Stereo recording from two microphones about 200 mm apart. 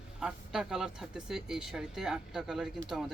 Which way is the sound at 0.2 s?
5° right (ahead or behind).